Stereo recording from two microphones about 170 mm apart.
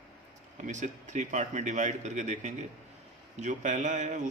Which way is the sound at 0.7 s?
45° right (ahead or behind).